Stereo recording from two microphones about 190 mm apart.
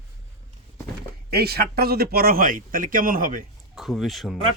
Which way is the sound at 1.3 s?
55° right (ahead or behind).